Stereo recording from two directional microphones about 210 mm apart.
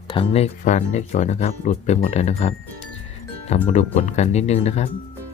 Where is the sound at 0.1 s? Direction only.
25° left (ahead or behind).